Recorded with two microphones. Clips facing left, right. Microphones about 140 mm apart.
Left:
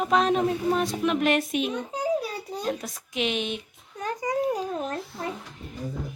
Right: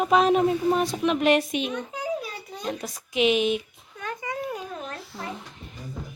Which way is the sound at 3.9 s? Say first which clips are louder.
Left 5 dB; 35° left (ahead or behind).